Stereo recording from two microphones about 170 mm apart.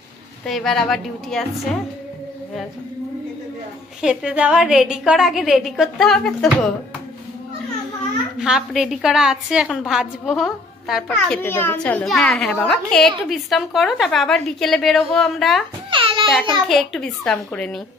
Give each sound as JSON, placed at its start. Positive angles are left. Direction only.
{"t": 0.5, "sound": "a child's voice", "side_deg": 0}
{"t": 4.0, "sound": "a child's voice", "side_deg": -5}
{"t": 8.4, "sound": "a child's voice", "side_deg": -5}
{"t": 11.4, "sound": "a child's voice", "side_deg": 10}
{"t": 15.9, "sound": "babbling", "side_deg": -30}
{"t": 16.3, "sound": "a child's voice", "side_deg": 0}